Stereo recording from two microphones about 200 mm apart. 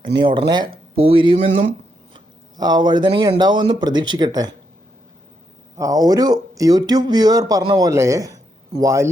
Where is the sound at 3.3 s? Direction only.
20° right (ahead or behind).